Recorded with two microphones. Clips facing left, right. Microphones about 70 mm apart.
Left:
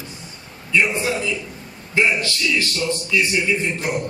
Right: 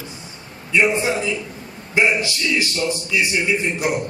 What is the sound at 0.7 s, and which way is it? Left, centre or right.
A man's voice, right.